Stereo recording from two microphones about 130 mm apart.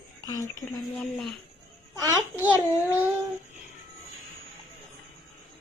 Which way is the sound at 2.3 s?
15° right (ahead or behind).